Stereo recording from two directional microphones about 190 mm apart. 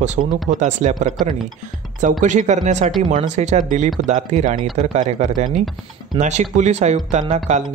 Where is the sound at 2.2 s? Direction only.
40° right (ahead or behind).